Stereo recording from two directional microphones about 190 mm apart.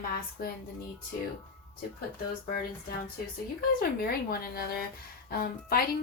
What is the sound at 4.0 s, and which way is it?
A woman's voice, 55° left (ahead or behind).